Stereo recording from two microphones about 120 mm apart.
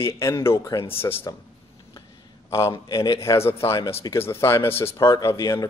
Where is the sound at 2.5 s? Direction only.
25° left (ahead or behind).